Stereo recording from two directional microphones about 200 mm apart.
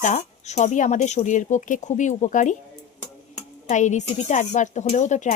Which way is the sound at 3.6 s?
35° left (ahead or behind).